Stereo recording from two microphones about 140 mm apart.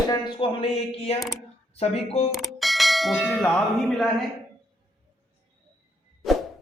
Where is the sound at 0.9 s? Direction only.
45° left (ahead or behind).